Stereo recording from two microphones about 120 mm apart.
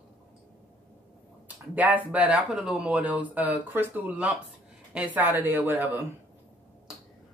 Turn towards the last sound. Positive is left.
turn(degrees=-15)  # may be behind; listen again after turning